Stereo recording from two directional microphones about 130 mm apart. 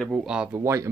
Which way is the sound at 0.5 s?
20° right (ahead or behind).